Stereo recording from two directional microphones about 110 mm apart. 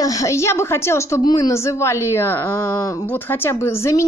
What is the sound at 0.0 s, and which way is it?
A woman's voice, 30° left (ahead or behind).